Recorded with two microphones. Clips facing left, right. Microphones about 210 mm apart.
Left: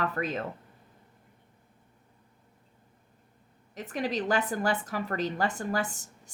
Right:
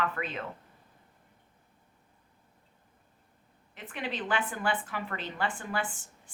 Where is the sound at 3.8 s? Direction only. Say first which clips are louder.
Left 6 dB; 40° left (ahead or behind).